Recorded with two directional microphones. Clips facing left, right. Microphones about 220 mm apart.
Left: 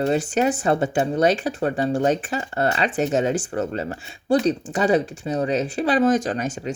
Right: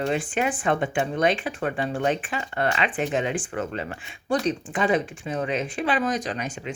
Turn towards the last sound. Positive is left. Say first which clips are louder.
# left 5 dB
turn(degrees=40)  # may be behind; listen again after turning